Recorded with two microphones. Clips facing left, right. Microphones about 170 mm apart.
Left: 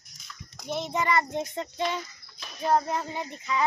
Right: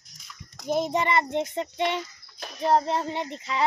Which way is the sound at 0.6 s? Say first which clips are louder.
Right 6 dB; 45° right (ahead or behind).